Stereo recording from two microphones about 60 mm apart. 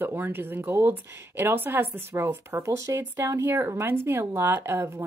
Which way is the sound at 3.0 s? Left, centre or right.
Right.